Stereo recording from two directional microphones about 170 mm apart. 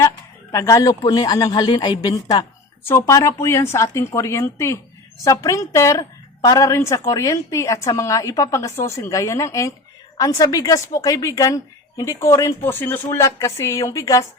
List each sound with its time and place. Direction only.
0.5 s a woman's voice: 20° left (ahead or behind)